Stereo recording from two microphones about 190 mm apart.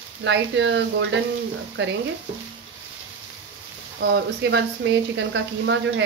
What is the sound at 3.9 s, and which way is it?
Speech, 65° right (ahead or behind).